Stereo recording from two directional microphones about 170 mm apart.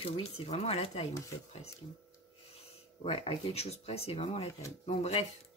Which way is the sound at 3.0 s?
35° left (ahead or behind).